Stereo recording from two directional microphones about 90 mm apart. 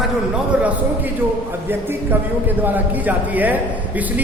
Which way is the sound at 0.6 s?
15° right (ahead or behind).